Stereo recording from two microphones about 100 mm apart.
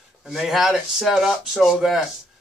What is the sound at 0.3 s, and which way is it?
Speech, centre (ahead or behind).